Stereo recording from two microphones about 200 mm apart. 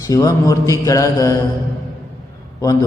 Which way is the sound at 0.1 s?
15° left (ahead or behind).